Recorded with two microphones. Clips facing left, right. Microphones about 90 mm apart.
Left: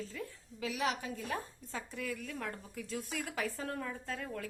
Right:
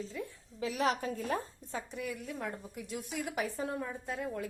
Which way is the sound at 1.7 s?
20° right (ahead or behind).